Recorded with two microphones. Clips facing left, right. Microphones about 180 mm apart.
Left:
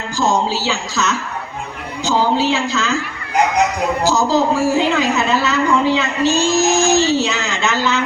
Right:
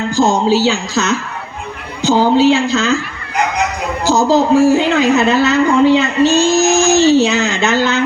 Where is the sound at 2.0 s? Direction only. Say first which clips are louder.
Right 6 dB; 25° right (ahead or behind).